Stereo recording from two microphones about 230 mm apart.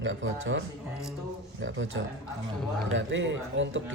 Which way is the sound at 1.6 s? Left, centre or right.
Right.